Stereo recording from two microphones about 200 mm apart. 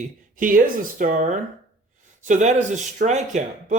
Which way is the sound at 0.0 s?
40° right (ahead or behind).